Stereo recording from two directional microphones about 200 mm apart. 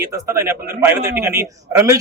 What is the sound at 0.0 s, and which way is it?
A man's voice, 15° right (ahead or behind).